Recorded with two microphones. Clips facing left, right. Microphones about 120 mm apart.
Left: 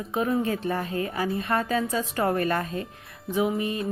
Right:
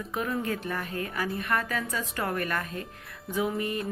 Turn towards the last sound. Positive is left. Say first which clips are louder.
# left 3 dB
turn(degrees=20)  # may be behind; listen again after turning